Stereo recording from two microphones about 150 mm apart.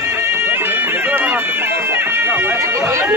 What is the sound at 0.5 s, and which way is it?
Bagpipes, 15° right (ahead or behind).